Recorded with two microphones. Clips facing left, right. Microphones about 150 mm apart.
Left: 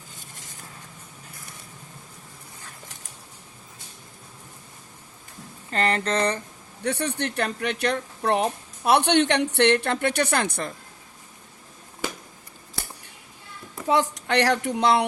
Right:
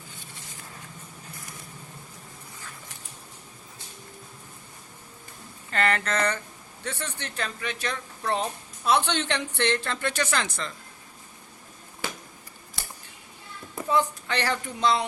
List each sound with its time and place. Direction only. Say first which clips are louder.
5.7 s speech: left 2 dB; 35° left (ahead or behind)
6.8 s speech: left 9 dB; 65° left (ahead or behind)
13.8 s speech: left 3 dB; 80° left